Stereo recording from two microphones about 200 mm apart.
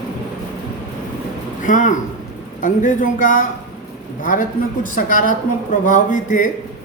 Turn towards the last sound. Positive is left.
turn(degrees=40)  # may be behind; listen again after turning